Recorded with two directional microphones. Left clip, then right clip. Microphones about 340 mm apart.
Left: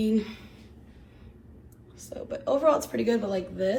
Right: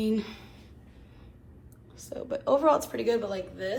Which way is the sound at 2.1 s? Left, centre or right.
Centre.